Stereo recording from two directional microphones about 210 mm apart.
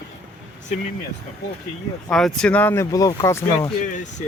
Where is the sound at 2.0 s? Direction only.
Centre (ahead or behind).